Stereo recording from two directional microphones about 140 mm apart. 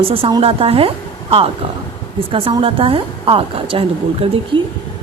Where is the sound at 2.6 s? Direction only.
40° right (ahead or behind).